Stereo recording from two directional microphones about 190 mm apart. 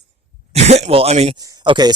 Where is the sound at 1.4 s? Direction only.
20° right (ahead or behind).